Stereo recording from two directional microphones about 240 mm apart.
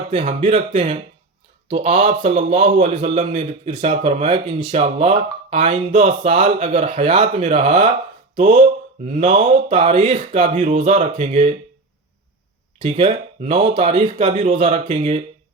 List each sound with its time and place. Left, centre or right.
0.1 s a man's voice: right
12.8 s a man's voice: right